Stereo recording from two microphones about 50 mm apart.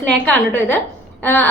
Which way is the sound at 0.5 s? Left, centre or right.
Left.